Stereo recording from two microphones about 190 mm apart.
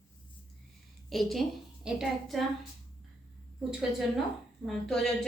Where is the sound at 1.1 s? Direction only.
Centre (ahead or behind).